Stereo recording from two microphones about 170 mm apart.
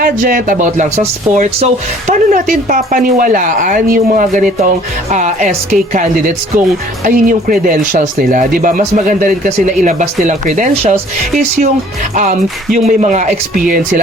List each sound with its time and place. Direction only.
0.0 s speech: 55° right (ahead or behind)